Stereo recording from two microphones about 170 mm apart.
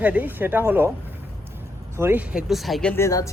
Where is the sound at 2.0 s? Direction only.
10° right (ahead or behind).